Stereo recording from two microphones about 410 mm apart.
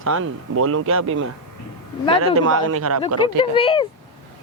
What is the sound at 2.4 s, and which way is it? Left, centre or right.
Speech, right.